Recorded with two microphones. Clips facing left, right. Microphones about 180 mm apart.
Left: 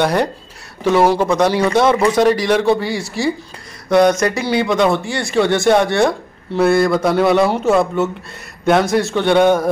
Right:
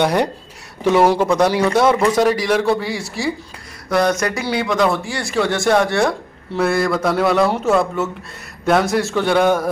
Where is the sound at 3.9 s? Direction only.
20° left (ahead or behind).